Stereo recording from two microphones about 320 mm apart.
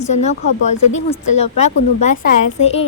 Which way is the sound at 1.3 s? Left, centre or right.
Left.